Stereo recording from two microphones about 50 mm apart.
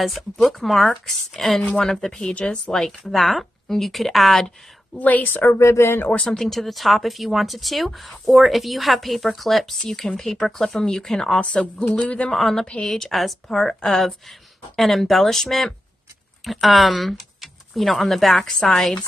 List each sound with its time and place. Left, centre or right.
0.4 s speech: centre
4.9 s a woman's voice: left
5.6 s speech: left
6.1 s speech: centre
6.4 s speech: centre
12.6 s speech: left
12.9 s speech: centre
13.6 s speech: centre